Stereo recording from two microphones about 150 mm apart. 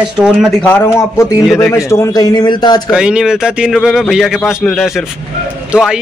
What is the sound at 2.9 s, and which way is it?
A man's voice, 5° right (ahead or behind).